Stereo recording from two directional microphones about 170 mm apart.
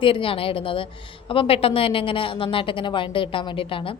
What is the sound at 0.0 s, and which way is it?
Speech, 30° left (ahead or behind).